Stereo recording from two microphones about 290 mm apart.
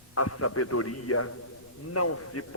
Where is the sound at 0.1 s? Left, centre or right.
Left.